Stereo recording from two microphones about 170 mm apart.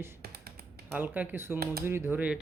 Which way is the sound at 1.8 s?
15° right (ahead or behind).